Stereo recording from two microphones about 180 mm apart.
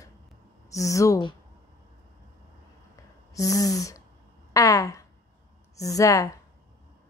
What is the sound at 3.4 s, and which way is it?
Speech, 20° left (ahead or behind).